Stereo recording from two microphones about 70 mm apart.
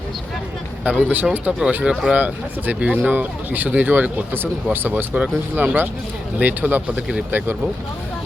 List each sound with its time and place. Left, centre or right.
0.9 s speech: right
1.8 s speech: centre
2.1 s speech: right
5.1 s speech: centre